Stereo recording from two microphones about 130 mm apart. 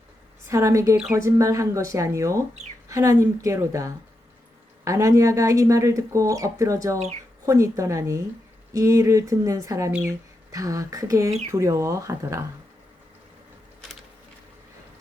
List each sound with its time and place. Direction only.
0.4 s speech: 25° right (ahead or behind)